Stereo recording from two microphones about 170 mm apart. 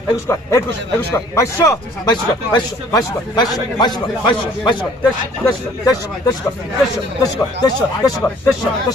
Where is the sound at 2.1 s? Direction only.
25° left (ahead or behind).